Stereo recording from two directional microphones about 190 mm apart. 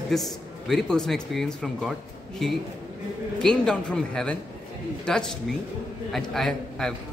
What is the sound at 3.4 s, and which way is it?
A man's voice, 5° left (ahead or behind).